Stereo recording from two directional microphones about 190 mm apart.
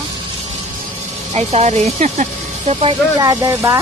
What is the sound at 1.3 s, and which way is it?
Speech, 35° right (ahead or behind).